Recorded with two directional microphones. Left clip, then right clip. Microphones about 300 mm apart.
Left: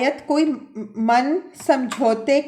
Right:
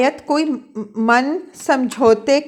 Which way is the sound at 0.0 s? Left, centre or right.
Right.